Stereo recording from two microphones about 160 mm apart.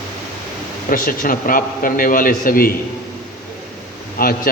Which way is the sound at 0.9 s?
60° left (ahead or behind).